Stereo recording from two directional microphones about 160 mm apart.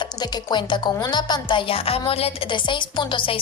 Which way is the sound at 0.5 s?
25° left (ahead or behind).